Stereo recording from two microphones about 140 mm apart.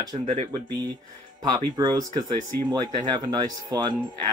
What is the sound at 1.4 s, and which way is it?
Speech, 30° right (ahead or behind).